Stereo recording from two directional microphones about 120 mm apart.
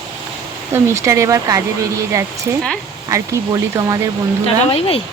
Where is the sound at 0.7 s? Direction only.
25° right (ahead or behind).